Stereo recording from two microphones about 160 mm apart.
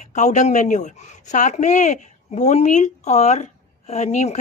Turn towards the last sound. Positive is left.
turn(degrees=45)  # may be behind; listen again after turning